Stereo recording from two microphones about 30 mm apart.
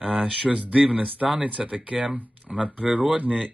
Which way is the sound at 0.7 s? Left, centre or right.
Right.